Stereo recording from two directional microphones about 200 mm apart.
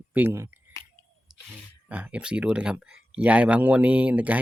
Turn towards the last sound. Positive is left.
turn(degrees=-5)  # may be behind; listen again after turning